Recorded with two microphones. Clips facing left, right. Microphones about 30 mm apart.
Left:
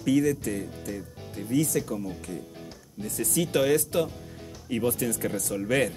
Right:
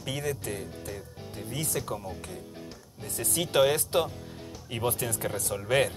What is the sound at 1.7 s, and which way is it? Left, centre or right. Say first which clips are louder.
Speech: left 4 dB; right.